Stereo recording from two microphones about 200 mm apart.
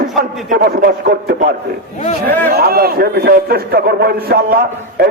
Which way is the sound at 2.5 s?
50° right (ahead or behind).